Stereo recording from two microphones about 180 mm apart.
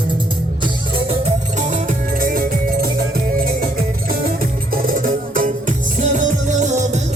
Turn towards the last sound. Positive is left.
turn(degrees=-40)  # may be behind; listen again after turning